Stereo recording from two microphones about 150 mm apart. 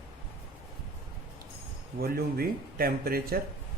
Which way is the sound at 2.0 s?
85° right.